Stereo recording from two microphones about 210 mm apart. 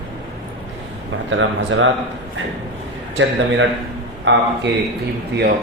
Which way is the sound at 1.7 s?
65° right (ahead or behind).